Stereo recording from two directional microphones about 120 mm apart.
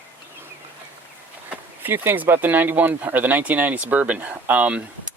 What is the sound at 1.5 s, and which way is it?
Speech, 15° right (ahead or behind).